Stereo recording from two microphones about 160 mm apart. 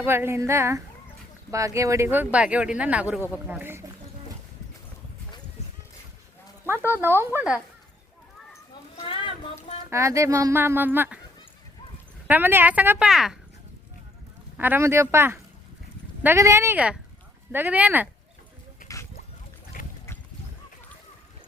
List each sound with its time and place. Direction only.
0.0 s speech: 15° right (ahead or behind)
6.7 s speech: 15° right (ahead or behind)
9.0 s a sound: 35° left (ahead or behind)
9.9 s speech: 20° right (ahead or behind)
12.3 s speech: 10° right (ahead or behind)
14.6 s speech: 15° right (ahead or behind)
19.8 s duck: 60° left (ahead or behind)